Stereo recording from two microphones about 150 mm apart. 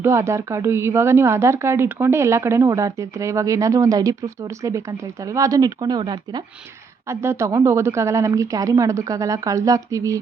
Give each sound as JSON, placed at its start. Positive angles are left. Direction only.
{"t": 0.0, "sound": "a woman's voice", "side_deg": -20}
{"t": 7.1, "sound": "a woman's voice", "side_deg": -20}